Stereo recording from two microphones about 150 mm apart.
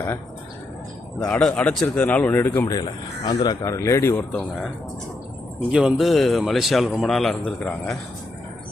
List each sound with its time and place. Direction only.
1.2 s speech: 5° left (ahead or behind)
2.6 s speech: 25° left (ahead or behind)
4.3 s a man's voice: 5° left (ahead or behind)
5.7 s a man's voice: centre (ahead or behind)